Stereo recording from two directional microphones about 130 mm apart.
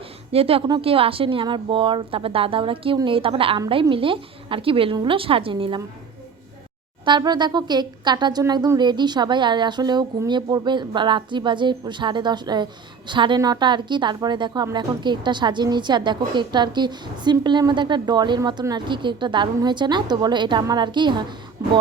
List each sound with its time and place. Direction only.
0.3 s speech: 45° right (ahead or behind)
7.0 s speech: 35° right (ahead or behind)
21.6 s music: 25° right (ahead or behind)